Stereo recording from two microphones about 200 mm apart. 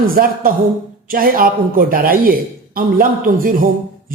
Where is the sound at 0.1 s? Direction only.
45° right (ahead or behind).